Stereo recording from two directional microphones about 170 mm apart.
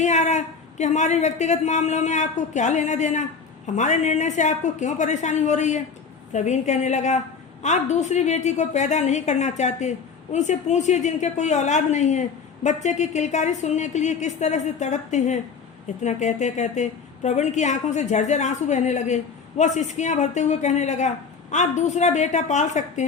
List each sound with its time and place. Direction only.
0.0 s a woman's voice: 45° left (ahead or behind)